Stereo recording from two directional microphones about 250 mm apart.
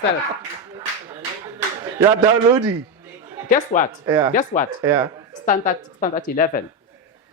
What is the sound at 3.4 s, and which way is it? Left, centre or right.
Speech, left.